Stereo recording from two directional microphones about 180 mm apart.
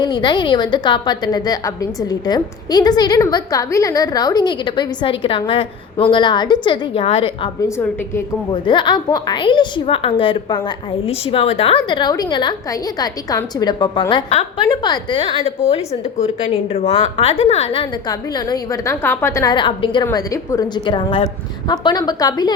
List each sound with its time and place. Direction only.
0.0 s a woman's voice: 25° left (ahead or behind)
8.5 s a woman's voice: 25° left (ahead or behind)
18.1 s a woman's voice: 20° left (ahead or behind)